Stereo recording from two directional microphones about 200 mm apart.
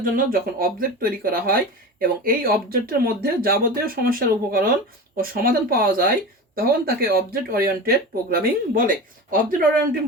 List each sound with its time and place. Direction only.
0.0 s speech: 45° right (ahead or behind)